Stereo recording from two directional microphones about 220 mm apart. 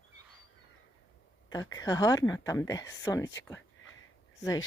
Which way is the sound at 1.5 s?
15° left (ahead or behind).